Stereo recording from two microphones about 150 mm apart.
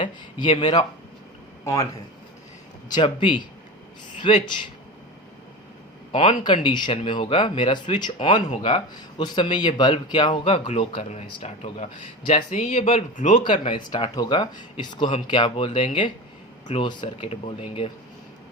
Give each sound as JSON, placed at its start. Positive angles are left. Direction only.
{"t": 0.5, "sound": "speech", "side_deg": 30}
{"t": 1.6, "sound": "speech", "side_deg": 20}
{"t": 2.9, "sound": "speech", "side_deg": 30}
{"t": 6.1, "sound": "speech", "side_deg": 35}
{"t": 13.4, "sound": "speech", "side_deg": 30}